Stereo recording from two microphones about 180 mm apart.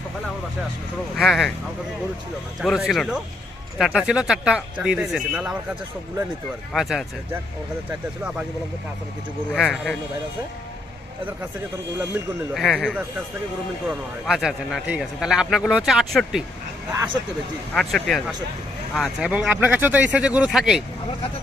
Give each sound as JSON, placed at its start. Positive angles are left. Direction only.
{"t": 1.1, "sound": "a man's voice", "side_deg": 0}
{"t": 2.6, "sound": "a man's voice", "side_deg": 0}
{"t": 6.7, "sound": "a man's voice", "side_deg": 0}
{"t": 9.5, "sound": "a man's voice", "side_deg": 5}
{"t": 12.5, "sound": "a man's voice", "side_deg": 5}
{"t": 16.9, "sound": "speech", "side_deg": -20}
{"t": 17.7, "sound": "a man's voice", "side_deg": 0}